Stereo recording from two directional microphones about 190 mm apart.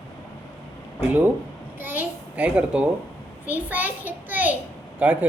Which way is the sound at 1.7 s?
10° right (ahead or behind).